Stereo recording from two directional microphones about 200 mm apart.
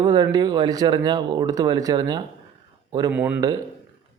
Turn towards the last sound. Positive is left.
turn(degrees=-5)  # may be behind; listen again after turning